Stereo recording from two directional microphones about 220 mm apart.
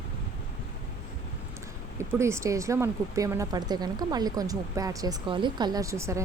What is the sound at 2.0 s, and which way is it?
Speech, 10° right (ahead or behind).